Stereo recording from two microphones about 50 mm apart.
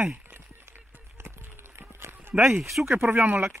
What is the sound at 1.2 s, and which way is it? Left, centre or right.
Run, right.